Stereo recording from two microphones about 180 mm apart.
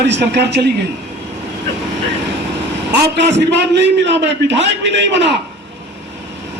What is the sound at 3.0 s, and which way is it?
A man's voice, 70° right (ahead or behind).